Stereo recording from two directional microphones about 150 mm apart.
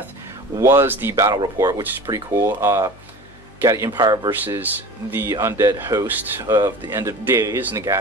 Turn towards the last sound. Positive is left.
turn(degrees=-15)  # may be behind; listen again after turning